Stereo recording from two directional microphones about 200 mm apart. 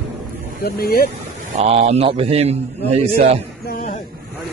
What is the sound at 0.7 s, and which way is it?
Speech, 50° left (ahead or behind).